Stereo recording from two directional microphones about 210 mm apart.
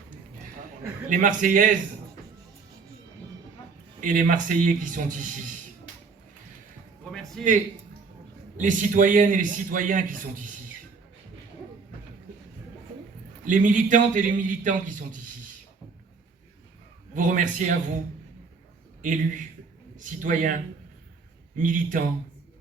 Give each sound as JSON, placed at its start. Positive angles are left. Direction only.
{"t": 1.0, "sound": "a man's voice", "side_deg": -40}
{"t": 4.0, "sound": "a man's voice", "side_deg": -40}
{"t": 7.0, "sound": "a sound", "side_deg": 0}
{"t": 8.5, "sound": "a man's voice", "side_deg": -40}
{"t": 13.4, "sound": "a man's voice", "side_deg": -40}
{"t": 17.2, "sound": "a man's voice", "side_deg": -40}
{"t": 19.0, "sound": "a man's voice", "side_deg": -40}